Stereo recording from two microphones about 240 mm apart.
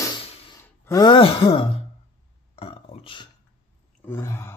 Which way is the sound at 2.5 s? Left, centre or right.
Left.